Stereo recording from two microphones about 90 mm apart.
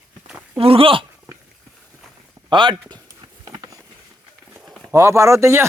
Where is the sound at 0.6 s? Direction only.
90° right.